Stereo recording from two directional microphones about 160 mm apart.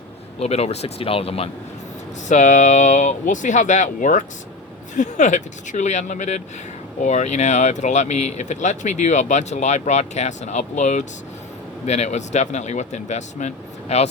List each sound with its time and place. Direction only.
0.3 s speech: 40° left (ahead or behind)
2.3 s speech: 50° left (ahead or behind)